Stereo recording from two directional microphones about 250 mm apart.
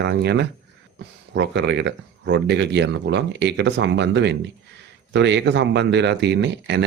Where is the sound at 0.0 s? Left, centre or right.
Right.